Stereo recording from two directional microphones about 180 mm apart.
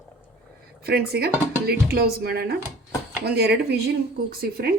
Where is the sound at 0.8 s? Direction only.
60° right (ahead or behind).